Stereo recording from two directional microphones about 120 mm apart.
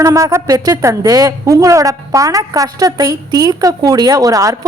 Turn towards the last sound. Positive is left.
turn(degrees=-30)  # may be behind; listen again after turning